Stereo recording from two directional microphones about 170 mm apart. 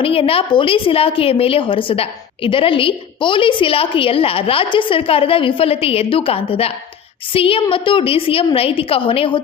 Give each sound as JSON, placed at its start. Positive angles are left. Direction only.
{"t": 0.0, "sound": "a woman's voice", "side_deg": 35}